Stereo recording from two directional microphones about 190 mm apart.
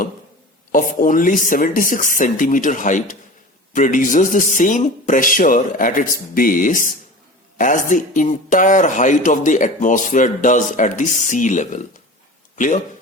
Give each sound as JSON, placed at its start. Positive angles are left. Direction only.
{"t": 0.7, "sound": "speech", "side_deg": 45}